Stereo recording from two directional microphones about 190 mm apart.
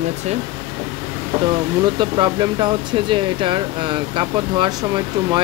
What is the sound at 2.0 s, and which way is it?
Speech, 25° right (ahead or behind).